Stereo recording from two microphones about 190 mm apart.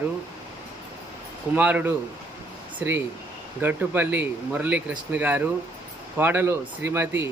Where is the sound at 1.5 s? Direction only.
10° right (ahead or behind).